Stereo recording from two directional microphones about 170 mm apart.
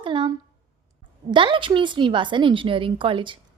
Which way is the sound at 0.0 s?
30° right (ahead or behind).